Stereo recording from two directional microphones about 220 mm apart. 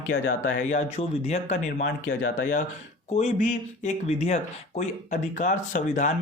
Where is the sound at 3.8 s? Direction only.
30° left (ahead or behind).